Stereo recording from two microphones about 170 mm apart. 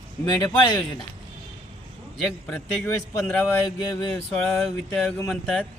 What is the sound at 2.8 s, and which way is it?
Speech, 10° left (ahead or behind).